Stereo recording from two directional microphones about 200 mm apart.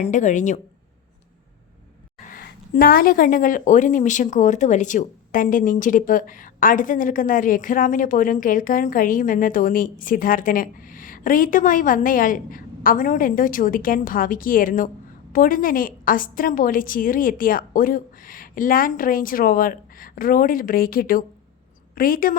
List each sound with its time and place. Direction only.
0.0 s speech: 40° left (ahead or behind)
2.2 s speech: 45° left (ahead or behind)